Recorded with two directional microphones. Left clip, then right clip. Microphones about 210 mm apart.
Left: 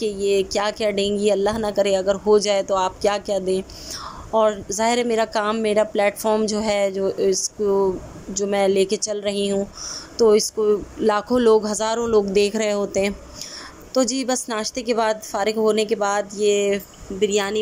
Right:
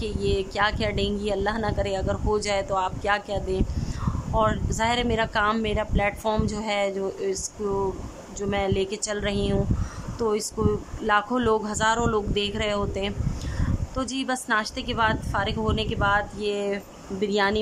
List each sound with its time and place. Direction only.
0.0 s a woman's voice: 15° left (ahead or behind)
8.4 s a woman's voice: 15° left (ahead or behind)